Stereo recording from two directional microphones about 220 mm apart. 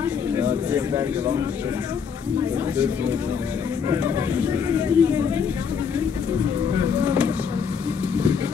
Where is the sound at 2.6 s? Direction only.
10° right (ahead or behind).